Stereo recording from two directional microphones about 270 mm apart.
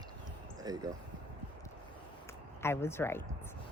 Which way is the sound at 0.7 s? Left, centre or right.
Centre.